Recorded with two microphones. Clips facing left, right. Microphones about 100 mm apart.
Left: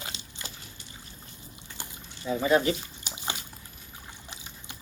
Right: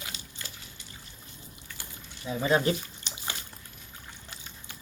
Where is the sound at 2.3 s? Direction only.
10° right (ahead or behind).